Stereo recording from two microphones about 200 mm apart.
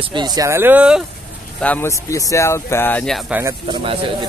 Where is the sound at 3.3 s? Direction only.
15° right (ahead or behind).